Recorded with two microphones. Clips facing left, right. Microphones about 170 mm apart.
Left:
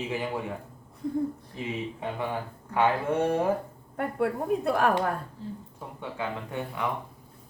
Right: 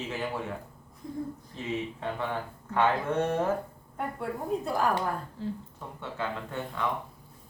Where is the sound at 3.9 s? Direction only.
70° left (ahead or behind).